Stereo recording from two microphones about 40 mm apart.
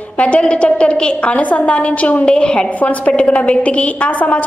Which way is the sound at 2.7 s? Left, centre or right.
Left.